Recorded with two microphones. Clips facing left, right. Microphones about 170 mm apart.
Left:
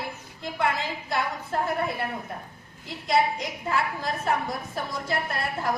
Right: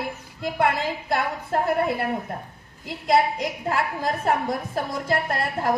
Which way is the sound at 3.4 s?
50° right (ahead or behind).